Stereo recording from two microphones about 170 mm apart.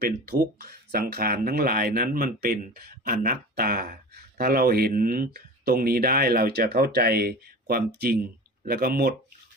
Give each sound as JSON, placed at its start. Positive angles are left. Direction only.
{"t": 0.0, "sound": "speech", "side_deg": -65}